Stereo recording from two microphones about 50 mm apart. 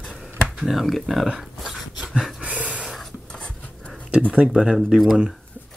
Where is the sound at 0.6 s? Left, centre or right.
Centre.